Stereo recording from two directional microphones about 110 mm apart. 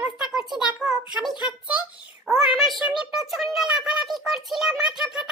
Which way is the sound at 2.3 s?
Centre (ahead or behind).